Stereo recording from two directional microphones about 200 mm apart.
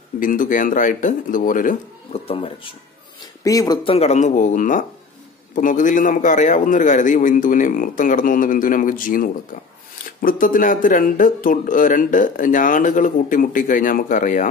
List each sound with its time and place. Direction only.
0.2 s speech: 40° left (ahead or behind)
2.2 s speech: 25° left (ahead or behind)